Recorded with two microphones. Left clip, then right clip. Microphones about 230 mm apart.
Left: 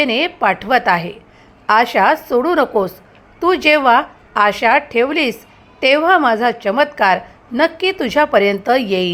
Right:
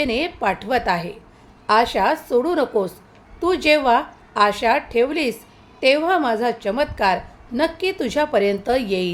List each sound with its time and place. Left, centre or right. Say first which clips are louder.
0.0 s a woman's voice: left 6 dB; centre